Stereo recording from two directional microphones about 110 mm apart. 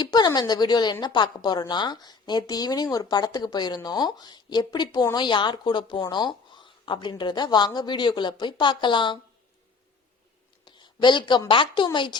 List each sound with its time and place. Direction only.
0.0 s a woman's voice: 40° left (ahead or behind)
10.7 s a woman's voice: 45° left (ahead or behind)